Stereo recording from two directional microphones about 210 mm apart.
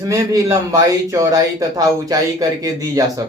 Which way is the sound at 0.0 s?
15° right (ahead or behind).